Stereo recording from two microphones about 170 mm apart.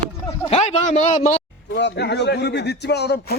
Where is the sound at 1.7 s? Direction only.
90° left.